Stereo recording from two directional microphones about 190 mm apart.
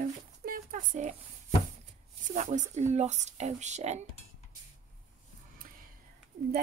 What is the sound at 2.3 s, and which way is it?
A woman's voice, 40° right (ahead or behind).